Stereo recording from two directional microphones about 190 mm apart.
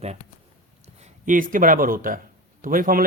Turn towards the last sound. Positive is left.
turn(degrees=-50)  # may be behind; listen again after turning